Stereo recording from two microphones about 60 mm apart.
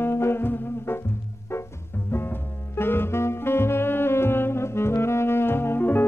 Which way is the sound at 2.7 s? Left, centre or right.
Left.